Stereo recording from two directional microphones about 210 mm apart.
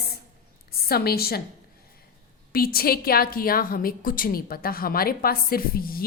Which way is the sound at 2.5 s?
45° left (ahead or behind).